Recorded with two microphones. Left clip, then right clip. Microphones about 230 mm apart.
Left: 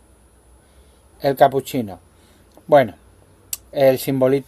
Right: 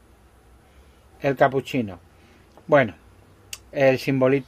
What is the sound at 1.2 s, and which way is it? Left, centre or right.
Speech, centre.